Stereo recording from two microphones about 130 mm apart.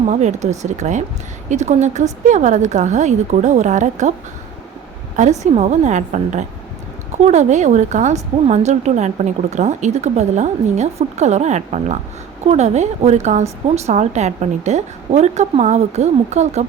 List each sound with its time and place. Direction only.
0.1 s speech: 65° right (ahead or behind)
5.4 s speech: 60° right (ahead or behind)